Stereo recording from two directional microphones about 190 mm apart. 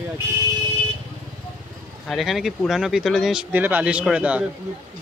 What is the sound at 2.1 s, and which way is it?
Speech, centre (ahead or behind).